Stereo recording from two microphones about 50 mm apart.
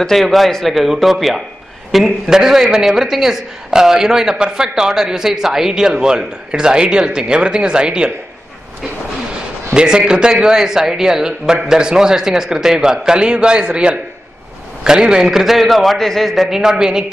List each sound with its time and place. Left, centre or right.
0.0 s a man's voice: centre
9.8 s a man's voice: centre
16.4 s a man's voice: centre